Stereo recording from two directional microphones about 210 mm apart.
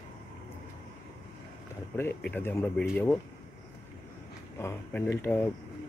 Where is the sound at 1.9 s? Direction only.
10° left (ahead or behind).